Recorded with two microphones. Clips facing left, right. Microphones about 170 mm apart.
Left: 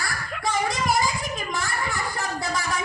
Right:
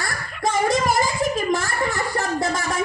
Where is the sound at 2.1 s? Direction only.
45° right (ahead or behind).